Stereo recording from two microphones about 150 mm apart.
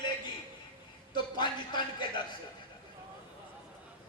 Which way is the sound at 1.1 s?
30° left (ahead or behind).